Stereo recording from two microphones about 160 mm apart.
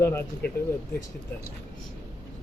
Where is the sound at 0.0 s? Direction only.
15° left (ahead or behind).